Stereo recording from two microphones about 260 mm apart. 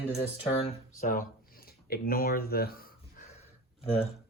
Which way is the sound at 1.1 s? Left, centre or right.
Left.